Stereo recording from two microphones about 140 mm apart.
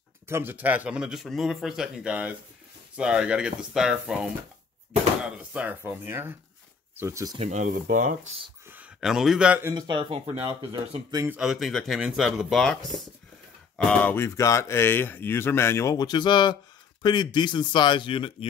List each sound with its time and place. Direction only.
0.3 s a man's voice: 15° right (ahead or behind)
5.5 s a man's voice: 10° right (ahead or behind)
7.3 s speech: 55° right (ahead or behind)
7.6 s speech: 75° right (ahead or behind)
8.6 s a sound: 10° right (ahead or behind)
9.6 s speech: 20° right (ahead or behind)
9.8 s speech: 35° right (ahead or behind)
11.2 s speech: 5° right (ahead or behind); by 18.5 s 35° left (ahead or behind)